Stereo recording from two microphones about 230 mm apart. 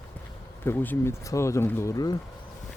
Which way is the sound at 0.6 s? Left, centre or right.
Centre.